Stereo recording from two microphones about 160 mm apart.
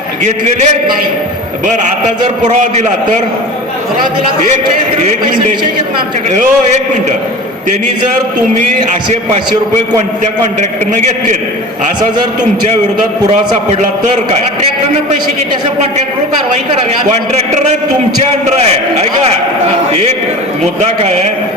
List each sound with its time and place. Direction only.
0.3 s a man's voice: 45° right (ahead or behind)
2.4 s a man's voice: 50° right (ahead or behind)
10.4 s a man's voice: 50° right (ahead or behind)
18.4 s a man's voice: 45° right (ahead or behind)
21.0 s a man's voice: 45° right (ahead or behind)